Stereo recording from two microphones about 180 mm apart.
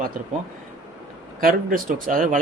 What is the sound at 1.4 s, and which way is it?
Speech, 50° right (ahead or behind).